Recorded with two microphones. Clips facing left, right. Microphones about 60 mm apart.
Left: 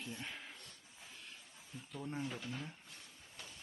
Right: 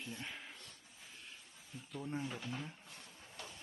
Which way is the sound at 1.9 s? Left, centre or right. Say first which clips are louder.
Right 1 dB; centre.